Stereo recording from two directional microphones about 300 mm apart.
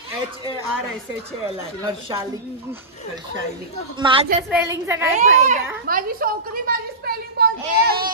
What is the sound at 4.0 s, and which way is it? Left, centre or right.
Speech, centre.